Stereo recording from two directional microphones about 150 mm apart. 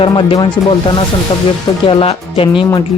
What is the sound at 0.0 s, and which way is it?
Speech, 35° left (ahead or behind).